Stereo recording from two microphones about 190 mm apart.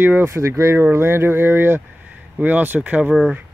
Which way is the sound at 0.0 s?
10° right (ahead or behind).